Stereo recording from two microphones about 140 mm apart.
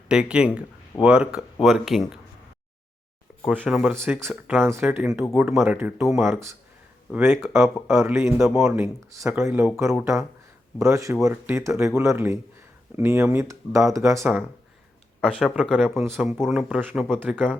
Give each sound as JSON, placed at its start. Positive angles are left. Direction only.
{"t": 0.1, "sound": "speech", "side_deg": -5}
{"t": 3.5, "sound": "speech", "side_deg": -10}
{"t": 6.1, "sound": "speech", "side_deg": -20}
{"t": 15.2, "sound": "speech", "side_deg": 5}